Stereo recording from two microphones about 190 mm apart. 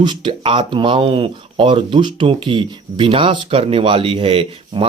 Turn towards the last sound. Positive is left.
turn(degrees=-30)  # may be behind; listen again after turning